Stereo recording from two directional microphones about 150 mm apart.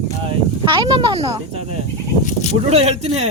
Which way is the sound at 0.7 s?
30° right (ahead or behind).